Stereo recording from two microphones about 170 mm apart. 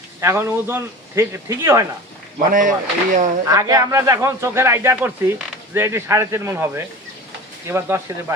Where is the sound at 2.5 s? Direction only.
50° right (ahead or behind).